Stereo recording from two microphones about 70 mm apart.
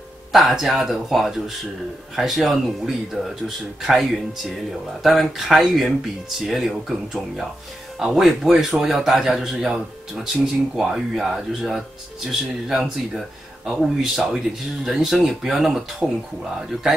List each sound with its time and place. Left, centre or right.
0.3 s speech: centre